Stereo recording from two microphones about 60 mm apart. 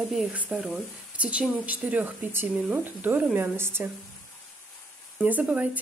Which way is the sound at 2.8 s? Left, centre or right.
Right.